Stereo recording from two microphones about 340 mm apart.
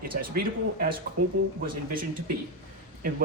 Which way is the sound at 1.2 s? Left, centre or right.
Right.